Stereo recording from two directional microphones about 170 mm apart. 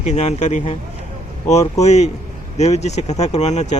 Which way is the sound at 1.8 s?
40° left (ahead or behind).